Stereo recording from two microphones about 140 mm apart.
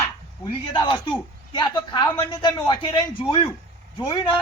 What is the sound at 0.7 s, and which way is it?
Speech, 30° left (ahead or behind).